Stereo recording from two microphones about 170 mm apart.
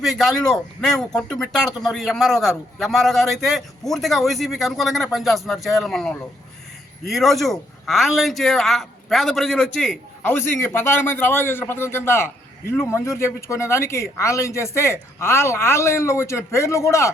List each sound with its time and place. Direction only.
0.0 s speech: centre (ahead or behind)
10.3 s a man's voice: 15° left (ahead or behind)